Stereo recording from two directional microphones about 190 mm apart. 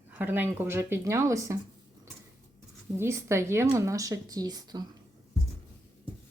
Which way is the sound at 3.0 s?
15° right (ahead or behind).